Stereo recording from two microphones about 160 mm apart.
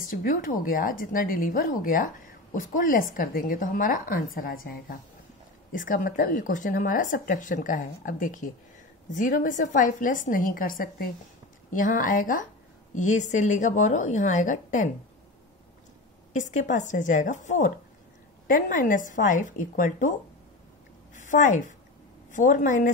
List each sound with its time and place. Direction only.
0.1 s speech: 60° left (ahead or behind)
16.3 s speech: 50° left (ahead or behind)
21.1 s a sound: 50° left (ahead or behind)
22.3 s speech: 55° left (ahead or behind)